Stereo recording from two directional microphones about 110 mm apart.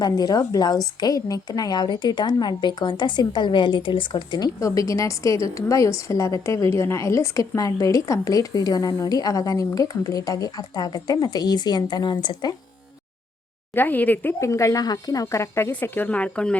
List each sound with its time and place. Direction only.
0.0 s a woman's voice: 35° left (ahead or behind)
13.7 s a woman's voice: 15° left (ahead or behind)
14.4 s speech: 25° left (ahead or behind)
15.7 s a woman's voice: 15° left (ahead or behind)